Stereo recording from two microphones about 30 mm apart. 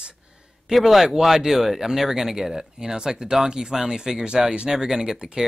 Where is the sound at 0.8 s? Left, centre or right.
Centre.